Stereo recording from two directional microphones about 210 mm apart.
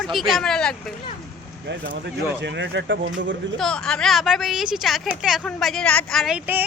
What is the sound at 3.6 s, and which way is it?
A woman's voice, 5° left (ahead or behind).